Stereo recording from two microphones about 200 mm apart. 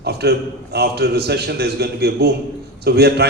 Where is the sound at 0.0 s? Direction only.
55° right (ahead or behind).